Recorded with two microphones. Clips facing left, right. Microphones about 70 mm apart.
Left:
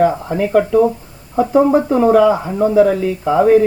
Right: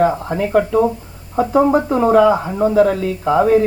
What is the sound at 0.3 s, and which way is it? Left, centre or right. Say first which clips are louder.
Speech: left 2 dB; right.